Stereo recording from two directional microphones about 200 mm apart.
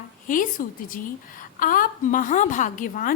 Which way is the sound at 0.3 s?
40° left (ahead or behind).